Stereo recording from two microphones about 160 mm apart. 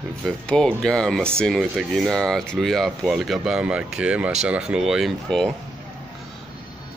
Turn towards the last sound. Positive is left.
turn(degrees=0)  # may be behind; listen again after turning